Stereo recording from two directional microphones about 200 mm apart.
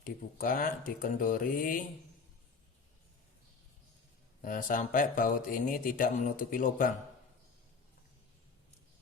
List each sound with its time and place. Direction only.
0.0 s speech: 45° left (ahead or behind)
4.4 s speech: 40° left (ahead or behind)